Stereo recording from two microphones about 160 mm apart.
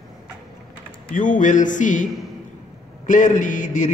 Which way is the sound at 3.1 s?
50° left (ahead or behind).